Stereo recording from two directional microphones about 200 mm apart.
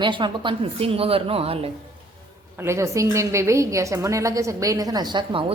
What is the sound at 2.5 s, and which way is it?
A woman's voice, 15° right (ahead or behind).